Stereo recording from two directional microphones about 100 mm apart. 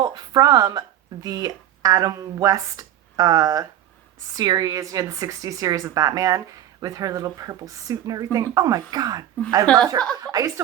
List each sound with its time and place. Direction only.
0.0 s speech: 40° right (ahead or behind)
9.6 s speech: 5° left (ahead or behind)
10.2 s speech: 40° right (ahead or behind)